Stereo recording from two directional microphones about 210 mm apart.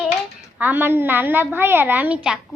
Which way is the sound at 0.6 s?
10° right (ahead or behind).